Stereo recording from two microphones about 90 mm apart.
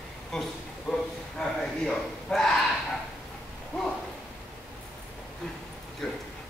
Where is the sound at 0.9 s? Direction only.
5° left (ahead or behind).